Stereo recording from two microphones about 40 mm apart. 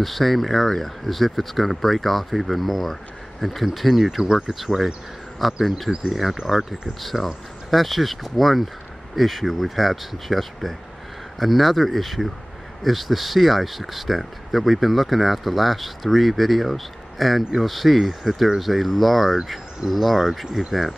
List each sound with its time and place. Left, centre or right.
0.0 s speech: centre
4.2 s speech: centre
4.6 s speech: centre